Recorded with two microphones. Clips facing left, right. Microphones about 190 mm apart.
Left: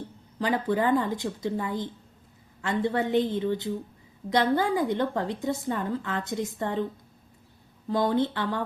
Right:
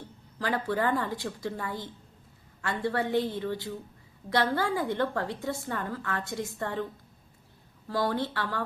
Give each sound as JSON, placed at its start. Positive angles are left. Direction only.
{"t": 0.3, "sound": "a woman's voice", "side_deg": 20}
{"t": 7.9, "sound": "a woman's voice", "side_deg": 20}